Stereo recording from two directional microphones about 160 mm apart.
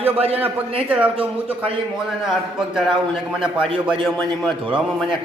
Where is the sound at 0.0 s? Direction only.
40° right (ahead or behind).